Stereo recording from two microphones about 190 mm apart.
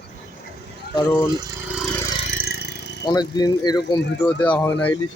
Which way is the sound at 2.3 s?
50° left (ahead or behind).